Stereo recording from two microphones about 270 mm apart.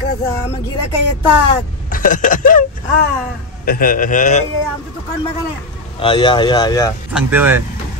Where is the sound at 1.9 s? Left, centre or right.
Left.